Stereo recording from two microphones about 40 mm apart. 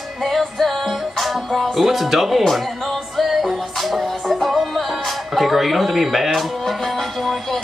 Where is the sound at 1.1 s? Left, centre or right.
Centre.